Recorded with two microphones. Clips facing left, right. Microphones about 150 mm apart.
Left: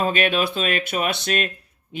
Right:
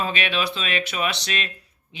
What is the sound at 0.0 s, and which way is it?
Speech, 45° left (ahead or behind).